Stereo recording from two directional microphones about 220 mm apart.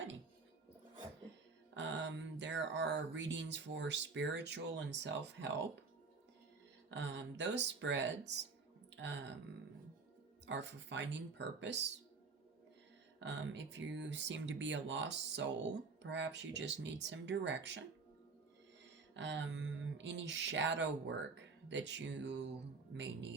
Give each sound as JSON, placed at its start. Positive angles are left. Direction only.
{"t": 1.3, "sound": "music", "side_deg": -55}
{"t": 1.7, "sound": "speech", "side_deg": -55}
{"t": 6.9, "sound": "speech", "side_deg": -55}
{"t": 10.4, "sound": "speech", "side_deg": -55}
{"t": 13.1, "sound": "speech", "side_deg": -55}
{"t": 19.1, "sound": "a sound", "side_deg": -55}